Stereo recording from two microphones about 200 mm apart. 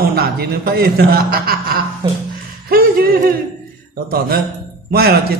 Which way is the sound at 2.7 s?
50° right (ahead or behind).